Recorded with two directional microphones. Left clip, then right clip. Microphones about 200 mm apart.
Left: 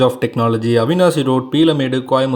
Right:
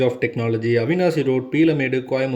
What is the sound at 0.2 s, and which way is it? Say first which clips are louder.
Speech: left 5 dB; 80° left.